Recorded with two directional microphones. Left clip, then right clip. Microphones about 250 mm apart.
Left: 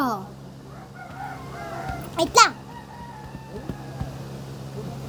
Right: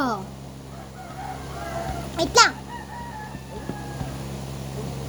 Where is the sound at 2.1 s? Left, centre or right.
Centre.